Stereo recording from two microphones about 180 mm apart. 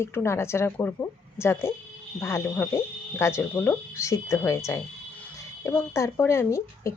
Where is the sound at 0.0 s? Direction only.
15° left (ahead or behind).